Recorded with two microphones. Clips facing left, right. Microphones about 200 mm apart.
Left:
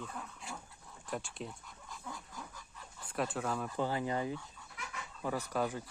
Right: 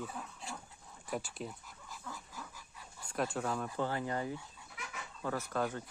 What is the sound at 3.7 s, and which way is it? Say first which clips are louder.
Speech: left 1 dB; 15° left (ahead or behind).